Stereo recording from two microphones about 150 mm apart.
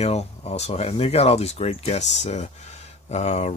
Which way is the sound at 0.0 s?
45° left (ahead or behind).